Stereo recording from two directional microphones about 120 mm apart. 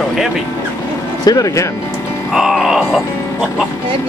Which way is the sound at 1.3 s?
30° left (ahead or behind).